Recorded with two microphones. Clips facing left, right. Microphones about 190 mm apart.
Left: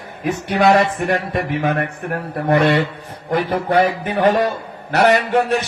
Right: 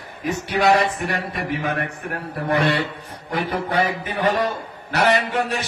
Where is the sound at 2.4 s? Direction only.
55° left (ahead or behind).